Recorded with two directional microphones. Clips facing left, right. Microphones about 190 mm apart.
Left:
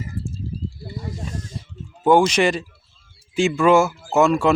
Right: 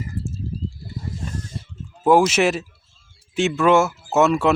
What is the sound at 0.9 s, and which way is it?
Snake, 75° left (ahead or behind).